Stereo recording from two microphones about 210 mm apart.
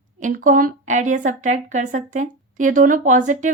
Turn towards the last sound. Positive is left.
turn(degrees=-35)  # may be behind; listen again after turning